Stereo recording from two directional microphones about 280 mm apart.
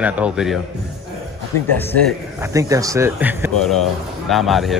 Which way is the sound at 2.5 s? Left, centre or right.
Centre.